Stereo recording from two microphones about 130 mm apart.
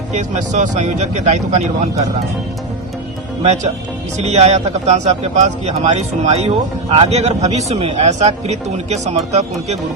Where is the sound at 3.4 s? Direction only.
60° right (ahead or behind).